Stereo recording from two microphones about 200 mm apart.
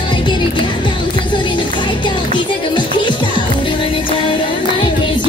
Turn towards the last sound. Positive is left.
turn(degrees=25)  # may be behind; listen again after turning